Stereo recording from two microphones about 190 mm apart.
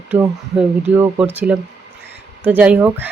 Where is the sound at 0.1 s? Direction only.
5° right (ahead or behind).